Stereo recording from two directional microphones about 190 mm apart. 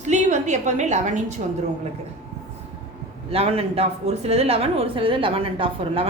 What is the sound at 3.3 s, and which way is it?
A woman's voice, 30° right (ahead or behind).